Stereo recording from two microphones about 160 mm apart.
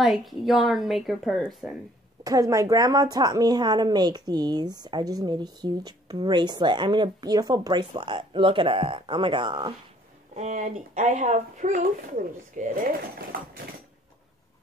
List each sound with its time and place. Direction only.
0.0 s speech: centre (ahead or behind)
2.2 s a woman's voice: 20° right (ahead or behind)
10.3 s speech: 45° right (ahead or behind)